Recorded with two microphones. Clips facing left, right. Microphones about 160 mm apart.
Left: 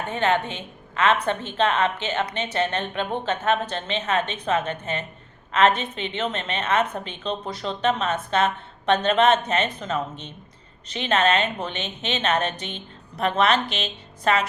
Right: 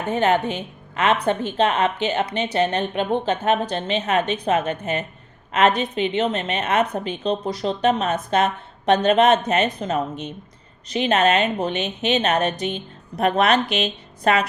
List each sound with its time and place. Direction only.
0.1 s a woman's voice: 40° right (ahead or behind)